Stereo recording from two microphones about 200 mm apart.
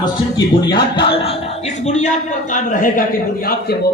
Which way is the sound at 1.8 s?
35° left (ahead or behind).